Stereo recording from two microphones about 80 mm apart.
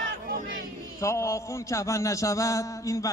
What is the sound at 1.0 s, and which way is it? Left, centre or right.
A man's voice, left.